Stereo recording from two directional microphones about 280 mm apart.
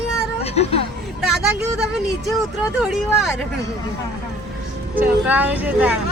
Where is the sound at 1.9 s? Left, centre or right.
Centre.